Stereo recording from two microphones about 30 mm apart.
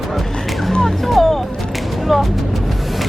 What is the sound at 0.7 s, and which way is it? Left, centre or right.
Music, centre.